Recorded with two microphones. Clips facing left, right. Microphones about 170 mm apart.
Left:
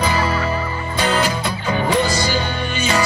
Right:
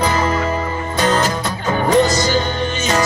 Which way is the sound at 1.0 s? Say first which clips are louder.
Right 2 dB; 45° right (ahead or behind).